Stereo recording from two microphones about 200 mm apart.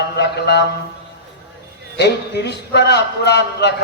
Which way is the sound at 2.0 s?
55° left (ahead or behind).